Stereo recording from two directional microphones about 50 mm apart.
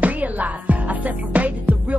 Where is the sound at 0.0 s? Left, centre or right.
Right.